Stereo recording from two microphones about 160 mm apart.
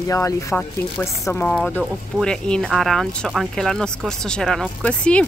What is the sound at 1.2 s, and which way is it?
Speech, 10° left (ahead or behind).